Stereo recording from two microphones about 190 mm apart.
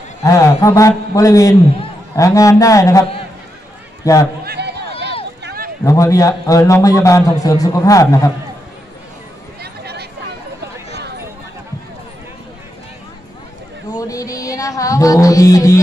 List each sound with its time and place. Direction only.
0.2 s a man's voice: 15° left (ahead or behind)
4.5 s a sound: 60° right (ahead or behind)
5.4 s run: 55° right (ahead or behind)
5.9 s a man's voice: 15° left (ahead or behind)
9.6 s a sound: 60° right (ahead or behind)
13.9 s music: 15° left (ahead or behind)